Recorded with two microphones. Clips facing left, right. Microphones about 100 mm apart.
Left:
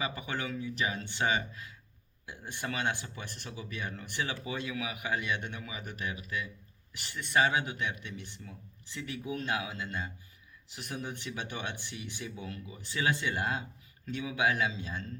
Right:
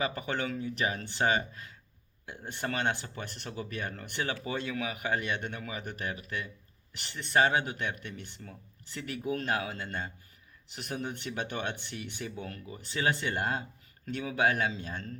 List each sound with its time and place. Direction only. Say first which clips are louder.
0.6 s speech: right 2 dB; 50° right (ahead or behind)